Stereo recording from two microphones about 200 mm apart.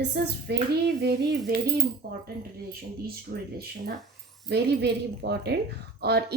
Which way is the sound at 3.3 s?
50° right (ahead or behind).